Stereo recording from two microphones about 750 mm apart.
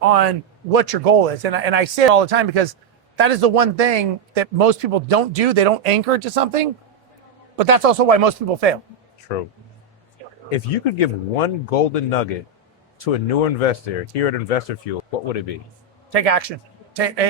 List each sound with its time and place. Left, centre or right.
0.1 s speech: right
10.5 s speech: left
16.0 s a man's voice: right